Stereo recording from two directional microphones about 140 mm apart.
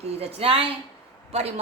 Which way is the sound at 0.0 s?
45° right (ahead or behind).